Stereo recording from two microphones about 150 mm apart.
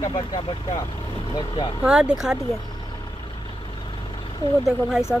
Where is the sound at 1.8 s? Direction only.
5° right (ahead or behind).